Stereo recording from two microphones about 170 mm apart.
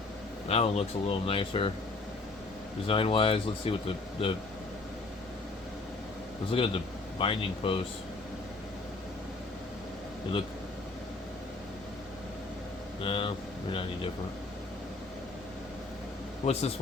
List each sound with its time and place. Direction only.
0.4 s speech: 35° left (ahead or behind)
2.8 s speech: 30° left (ahead or behind)
6.5 s speech: 30° left (ahead or behind)
13.0 s speech: 30° left (ahead or behind)
16.5 s speech: 35° left (ahead or behind)